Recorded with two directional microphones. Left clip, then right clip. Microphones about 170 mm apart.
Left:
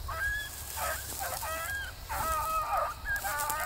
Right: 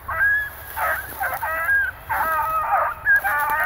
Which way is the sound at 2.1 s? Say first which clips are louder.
Right 8 dB; 55° left (ahead or behind).